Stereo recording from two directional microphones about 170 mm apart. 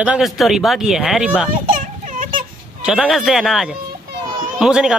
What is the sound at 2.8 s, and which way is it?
Speech, centre (ahead or behind).